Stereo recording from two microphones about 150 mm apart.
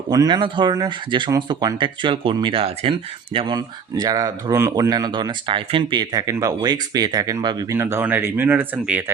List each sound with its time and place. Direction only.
0.1 s speech: 30° right (ahead or behind)
3.3 s speech: 30° right (ahead or behind)
7.8 s speech: 15° right (ahead or behind)